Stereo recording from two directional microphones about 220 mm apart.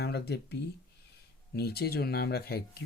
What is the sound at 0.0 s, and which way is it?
Speech, 45° left (ahead or behind).